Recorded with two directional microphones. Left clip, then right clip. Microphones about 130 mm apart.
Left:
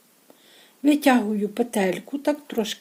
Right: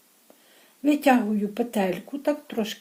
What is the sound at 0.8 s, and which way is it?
Speech, 45° left (ahead or behind).